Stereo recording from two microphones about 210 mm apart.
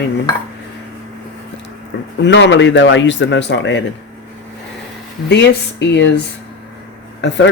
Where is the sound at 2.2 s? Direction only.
60° left (ahead or behind).